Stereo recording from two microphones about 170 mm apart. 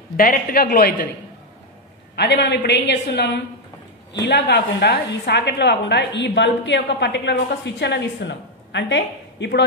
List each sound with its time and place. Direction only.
0.2 s a woman's voice: 55° left (ahead or behind)
2.1 s a woman's voice: 90° left